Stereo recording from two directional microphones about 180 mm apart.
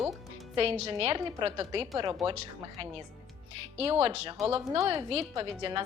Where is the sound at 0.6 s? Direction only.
35° right (ahead or behind).